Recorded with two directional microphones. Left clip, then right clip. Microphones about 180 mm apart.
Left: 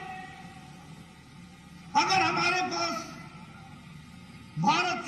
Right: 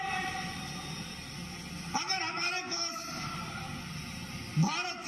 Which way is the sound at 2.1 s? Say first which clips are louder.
Left 8 dB; centre (ahead or behind).